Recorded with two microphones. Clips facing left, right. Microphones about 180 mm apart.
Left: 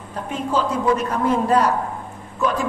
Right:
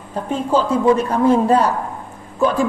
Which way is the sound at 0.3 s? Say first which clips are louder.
Right 5 dB; 30° right (ahead or behind).